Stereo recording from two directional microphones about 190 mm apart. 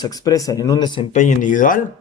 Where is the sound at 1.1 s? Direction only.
40° left (ahead or behind).